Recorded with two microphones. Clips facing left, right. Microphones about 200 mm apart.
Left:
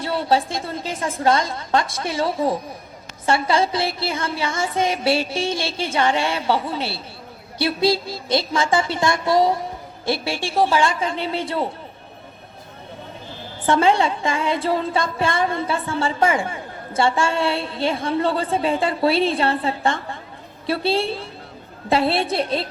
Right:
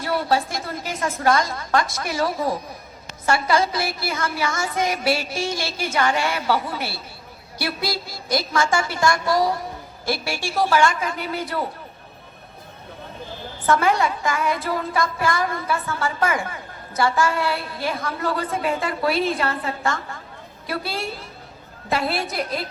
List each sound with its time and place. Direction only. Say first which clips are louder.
0.0 s a woman's voice: left 2 dB; 25° left (ahead or behind)
13.7 s a woman's voice: left 2 dB; 30° left (ahead or behind)